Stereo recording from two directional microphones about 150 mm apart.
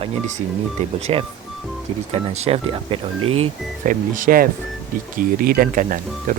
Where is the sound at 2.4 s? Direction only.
40° right (ahead or behind).